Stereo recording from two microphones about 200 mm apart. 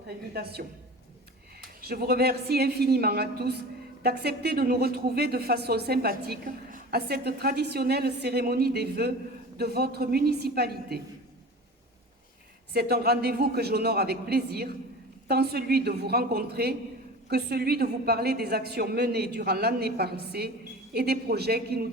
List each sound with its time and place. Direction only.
0.3 s speech: 50° right (ahead or behind)
1.8 s speech: 50° right (ahead or behind)
12.7 s speech: 50° right (ahead or behind)